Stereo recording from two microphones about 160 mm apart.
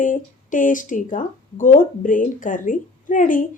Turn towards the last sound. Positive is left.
turn(degrees=55)  # may be behind; listen again after turning